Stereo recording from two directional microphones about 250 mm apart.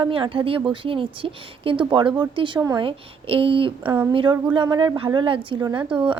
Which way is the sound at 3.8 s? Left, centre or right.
Centre.